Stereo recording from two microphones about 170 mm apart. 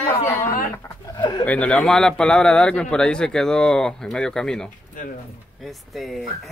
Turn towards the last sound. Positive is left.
turn(degrees=0)  # may be behind; listen again after turning